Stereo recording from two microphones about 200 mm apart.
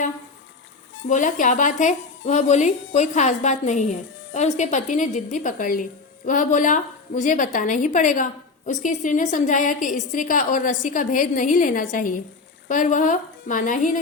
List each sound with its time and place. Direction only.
1.0 s a woman's voice: 40° left (ahead or behind)